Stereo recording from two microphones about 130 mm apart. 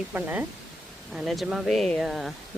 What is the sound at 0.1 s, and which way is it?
Speech, 15° right (ahead or behind).